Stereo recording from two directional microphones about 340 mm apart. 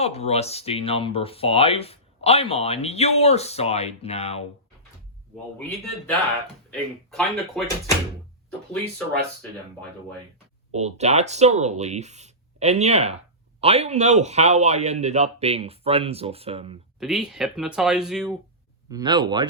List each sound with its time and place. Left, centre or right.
0.0 s speech: centre
5.5 s speech: centre
10.7 s a man's voice: centre
17.0 s a man's voice: centre